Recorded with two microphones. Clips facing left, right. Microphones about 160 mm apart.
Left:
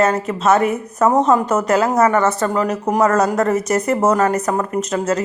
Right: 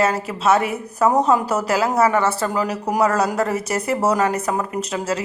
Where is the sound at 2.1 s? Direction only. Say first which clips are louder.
Left 3 dB; 5° right (ahead or behind).